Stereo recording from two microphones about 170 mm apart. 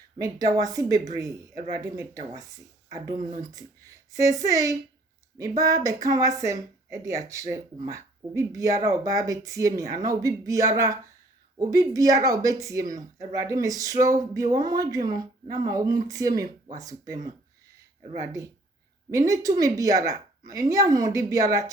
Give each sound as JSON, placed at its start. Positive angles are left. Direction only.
{"t": 0.2, "sound": "a woman's voice", "side_deg": -20}
{"t": 3.5, "sound": "a woman's voice", "side_deg": -20}
{"t": 18.2, "sound": "a woman's voice", "side_deg": -20}